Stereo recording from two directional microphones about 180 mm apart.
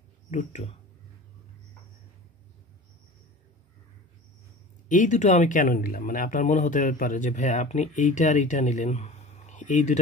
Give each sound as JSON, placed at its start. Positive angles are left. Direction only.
{"t": 0.3, "sound": "speech", "side_deg": 45}
{"t": 4.8, "sound": "speech", "side_deg": 45}